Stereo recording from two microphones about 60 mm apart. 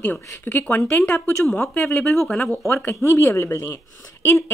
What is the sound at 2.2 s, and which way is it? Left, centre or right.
Speech, centre.